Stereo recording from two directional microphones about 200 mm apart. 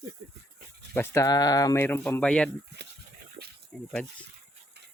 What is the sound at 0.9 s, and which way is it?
Speech, 10° left (ahead or behind).